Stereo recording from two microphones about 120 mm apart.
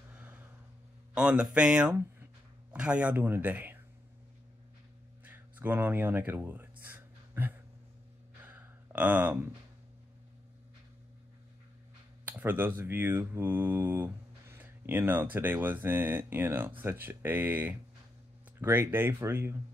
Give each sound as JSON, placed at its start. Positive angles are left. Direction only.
{"t": 0.1, "sound": "vehicle", "side_deg": -10}
{"t": 1.1, "sound": "speech", "side_deg": -10}
{"t": 5.2, "sound": "a sound", "side_deg": -15}
{"t": 8.4, "sound": "sigh", "side_deg": -15}
{"t": 12.3, "sound": "speech", "side_deg": -15}